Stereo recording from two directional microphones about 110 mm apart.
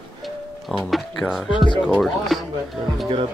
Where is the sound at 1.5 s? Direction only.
45° left (ahead or behind).